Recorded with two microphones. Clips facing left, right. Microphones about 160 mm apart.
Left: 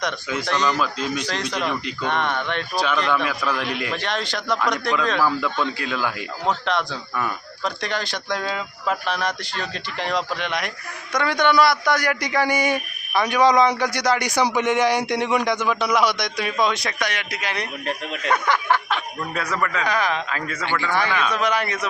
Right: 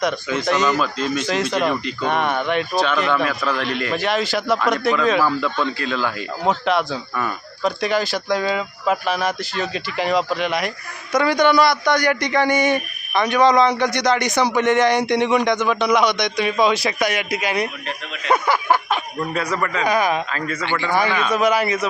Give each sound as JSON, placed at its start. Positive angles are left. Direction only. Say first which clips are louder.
{"t": 0.4, "sound": "a man's voice", "louder": "right 4 dB", "side_deg": -10}
{"t": 0.8, "sound": "speech", "louder": "right 2 dB", "side_deg": 10}
{"t": 1.3, "sound": "a man's voice", "louder": "right 6 dB", "side_deg": -5}
{"t": 3.2, "sound": "speech", "louder": "right 2 dB", "side_deg": 10}
{"t": 3.9, "sound": "speech", "louder": "right 6 dB", "side_deg": -5}
{"t": 5.2, "sound": "speech", "louder": "right 2 dB", "side_deg": 10}
{"t": 6.7, "sound": "a man's voice", "louder": "right 4 dB", "side_deg": -5}
{"t": 19.3, "sound": "speech", "louder": "right 4 dB", "side_deg": 0}
{"t": 19.8, "sound": "a man's voice", "louder": "right 7 dB", "side_deg": -10}
{"t": 20.3, "sound": "speech", "louder": "right 3 dB", "side_deg": 5}
{"t": 20.7, "sound": "a man's voice", "louder": "right 2 dB", "side_deg": -15}